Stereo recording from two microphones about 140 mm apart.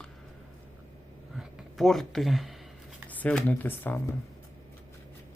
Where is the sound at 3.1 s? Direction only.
10° left (ahead or behind).